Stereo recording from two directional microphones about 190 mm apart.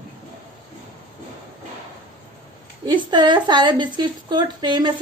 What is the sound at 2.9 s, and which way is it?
A woman's voice, 20° right (ahead or behind).